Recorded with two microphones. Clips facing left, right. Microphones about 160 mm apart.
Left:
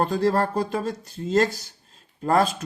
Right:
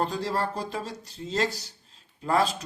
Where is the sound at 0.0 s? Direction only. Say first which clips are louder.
Left 6 dB; 55° left (ahead or behind).